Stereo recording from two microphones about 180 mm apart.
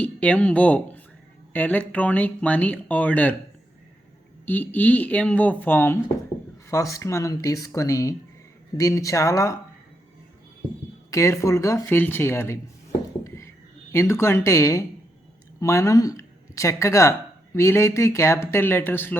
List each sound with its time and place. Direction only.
0.0 s speech: 5° left (ahead or behind)
4.4 s speech: 10° left (ahead or behind)
11.1 s speech: 15° left (ahead or behind)
13.2 s a sound: 15° left (ahead or behind)
13.9 s speech: 15° left (ahead or behind)